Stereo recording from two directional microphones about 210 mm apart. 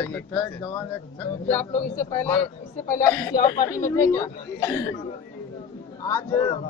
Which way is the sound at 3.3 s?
20° left (ahead or behind).